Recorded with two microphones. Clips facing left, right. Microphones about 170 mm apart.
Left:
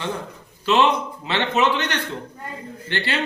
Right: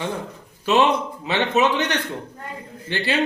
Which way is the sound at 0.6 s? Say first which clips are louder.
Even; 15° right (ahead or behind).